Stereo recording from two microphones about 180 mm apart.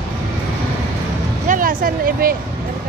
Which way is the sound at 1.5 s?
50° right (ahead or behind).